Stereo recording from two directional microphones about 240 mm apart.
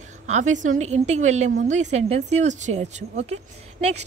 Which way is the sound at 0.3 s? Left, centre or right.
Right.